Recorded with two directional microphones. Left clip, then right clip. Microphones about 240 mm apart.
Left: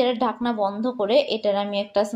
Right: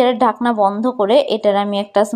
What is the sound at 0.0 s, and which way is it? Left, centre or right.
Speech, right.